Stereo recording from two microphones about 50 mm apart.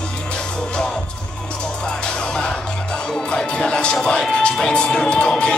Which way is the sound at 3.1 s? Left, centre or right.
Centre.